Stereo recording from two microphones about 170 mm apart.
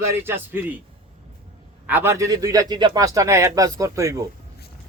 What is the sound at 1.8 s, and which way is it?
A man's voice, 10° right (ahead or behind).